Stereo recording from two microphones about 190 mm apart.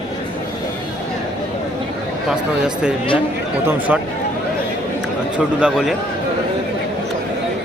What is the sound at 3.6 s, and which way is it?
Speech, 10° right (ahead or behind).